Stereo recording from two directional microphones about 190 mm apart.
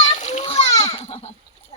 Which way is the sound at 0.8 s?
30° left (ahead or behind).